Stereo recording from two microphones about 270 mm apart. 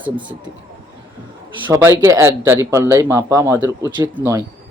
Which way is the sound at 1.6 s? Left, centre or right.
Centre.